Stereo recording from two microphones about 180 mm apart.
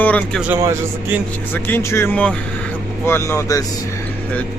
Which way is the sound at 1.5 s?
10° left (ahead or behind).